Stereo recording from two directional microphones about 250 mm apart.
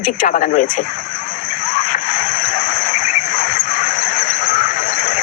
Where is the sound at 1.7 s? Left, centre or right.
Left.